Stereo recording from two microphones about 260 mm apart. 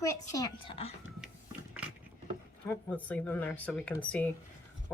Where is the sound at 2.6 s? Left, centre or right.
Centre.